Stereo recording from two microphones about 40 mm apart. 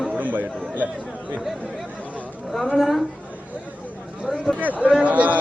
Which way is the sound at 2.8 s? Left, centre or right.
Centre.